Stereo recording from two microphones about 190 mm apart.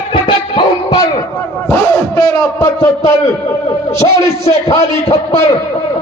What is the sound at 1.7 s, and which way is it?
A man's voice, 15° left (ahead or behind).